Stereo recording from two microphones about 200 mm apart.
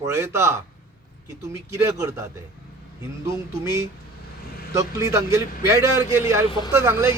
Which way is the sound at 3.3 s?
15° right (ahead or behind).